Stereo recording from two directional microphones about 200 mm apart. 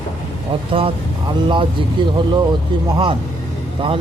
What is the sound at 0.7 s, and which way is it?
A man's voice, 25° right (ahead or behind).